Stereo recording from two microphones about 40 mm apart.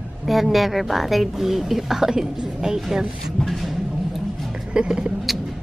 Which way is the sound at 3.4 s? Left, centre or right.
Centre.